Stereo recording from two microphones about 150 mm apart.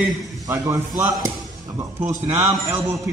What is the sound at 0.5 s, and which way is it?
Speech, 20° right (ahead or behind).